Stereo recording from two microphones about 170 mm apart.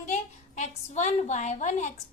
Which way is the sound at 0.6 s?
40° left (ahead or behind).